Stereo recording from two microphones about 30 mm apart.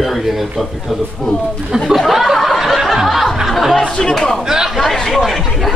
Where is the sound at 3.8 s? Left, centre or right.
Left.